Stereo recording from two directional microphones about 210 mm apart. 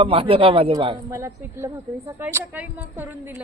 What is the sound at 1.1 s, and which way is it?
Speech, 15° right (ahead or behind).